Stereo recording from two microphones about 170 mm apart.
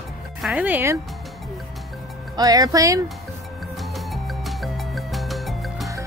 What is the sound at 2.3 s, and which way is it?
Speech, 20° right (ahead or behind).